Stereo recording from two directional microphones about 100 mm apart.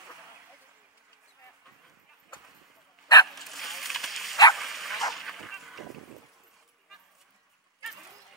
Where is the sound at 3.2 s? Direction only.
Centre (ahead or behind).